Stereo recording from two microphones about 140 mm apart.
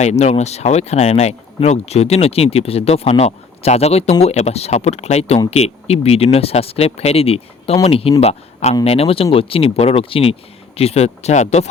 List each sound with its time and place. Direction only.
0.0 s speech: 55° left (ahead or behind)